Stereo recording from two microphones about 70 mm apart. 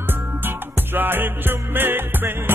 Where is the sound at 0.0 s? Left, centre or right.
Right.